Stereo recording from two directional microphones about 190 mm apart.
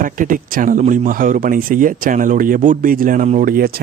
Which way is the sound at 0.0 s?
45° right (ahead or behind).